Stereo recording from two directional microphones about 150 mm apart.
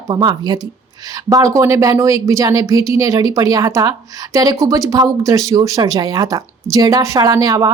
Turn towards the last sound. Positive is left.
turn(degrees=-25)  # may be behind; listen again after turning